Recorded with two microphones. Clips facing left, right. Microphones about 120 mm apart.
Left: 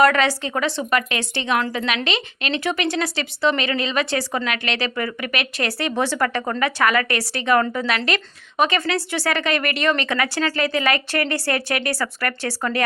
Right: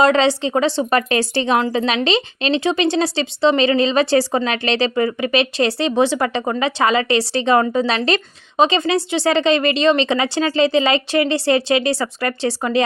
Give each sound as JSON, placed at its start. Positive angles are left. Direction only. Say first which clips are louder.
{"t": 0.0, "sound": "speech", "louder": "right 3 dB", "side_deg": -25}